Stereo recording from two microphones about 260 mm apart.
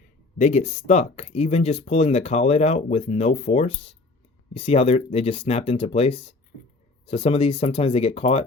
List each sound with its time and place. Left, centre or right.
0.3 s speech: left